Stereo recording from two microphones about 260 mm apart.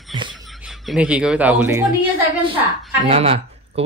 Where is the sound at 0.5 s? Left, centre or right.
Centre.